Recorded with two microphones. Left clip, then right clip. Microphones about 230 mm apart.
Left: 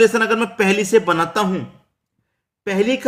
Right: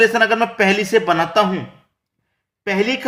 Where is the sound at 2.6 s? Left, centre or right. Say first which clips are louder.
Even; centre.